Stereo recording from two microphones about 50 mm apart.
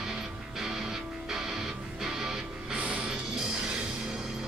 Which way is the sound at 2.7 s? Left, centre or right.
Right.